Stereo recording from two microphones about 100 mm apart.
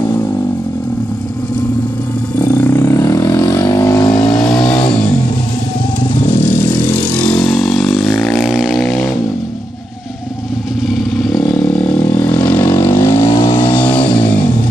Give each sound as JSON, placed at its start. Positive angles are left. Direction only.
{"t": 2.4, "sound": "vehicle", "side_deg": 15}
{"t": 4.2, "sound": "vehicle", "side_deg": 5}
{"t": 7.2, "sound": "vehicle", "side_deg": 10}
{"t": 10.9, "sound": "vehicle", "side_deg": 5}
{"t": 13.7, "sound": "a sound", "side_deg": 15}